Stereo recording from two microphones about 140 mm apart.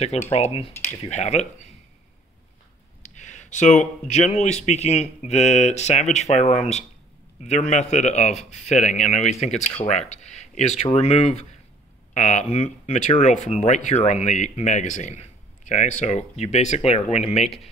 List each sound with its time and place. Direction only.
0.3 s speech: 45° left (ahead or behind)
3.0 s speech: 60° left (ahead or behind)